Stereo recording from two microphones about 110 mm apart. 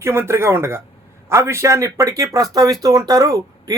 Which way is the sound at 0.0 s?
25° right (ahead or behind).